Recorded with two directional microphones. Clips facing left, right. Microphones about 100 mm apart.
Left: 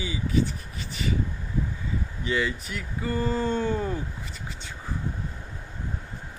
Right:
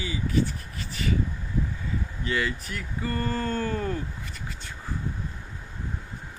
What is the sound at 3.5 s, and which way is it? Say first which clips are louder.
Speech: left 2 dB; 20° left (ahead or behind).